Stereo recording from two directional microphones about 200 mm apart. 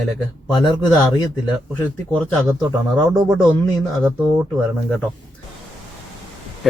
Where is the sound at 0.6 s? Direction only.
20° left (ahead or behind).